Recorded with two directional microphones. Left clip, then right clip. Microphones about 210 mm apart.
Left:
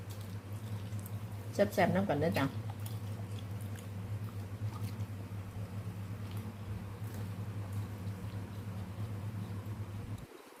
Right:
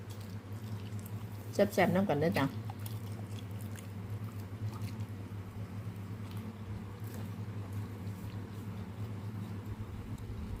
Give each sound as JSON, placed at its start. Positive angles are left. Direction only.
{"t": 1.5, "sound": "a woman's voice", "side_deg": -20}